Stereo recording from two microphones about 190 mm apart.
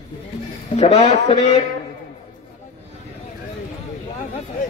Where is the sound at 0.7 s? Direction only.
35° left (ahead or behind).